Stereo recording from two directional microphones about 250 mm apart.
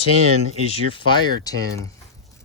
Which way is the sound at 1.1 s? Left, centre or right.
Centre.